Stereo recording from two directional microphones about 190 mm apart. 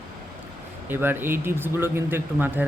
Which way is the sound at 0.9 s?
10° right (ahead or behind).